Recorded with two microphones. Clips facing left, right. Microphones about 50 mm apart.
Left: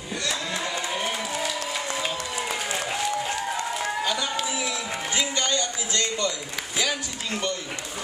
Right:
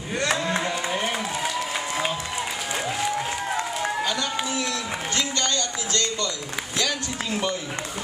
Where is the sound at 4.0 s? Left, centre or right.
Centre.